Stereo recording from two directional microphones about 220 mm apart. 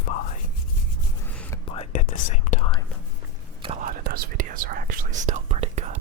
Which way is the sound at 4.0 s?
40° right (ahead or behind).